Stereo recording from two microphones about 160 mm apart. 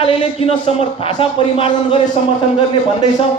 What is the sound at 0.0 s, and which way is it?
A man's voice, 40° left (ahead or behind).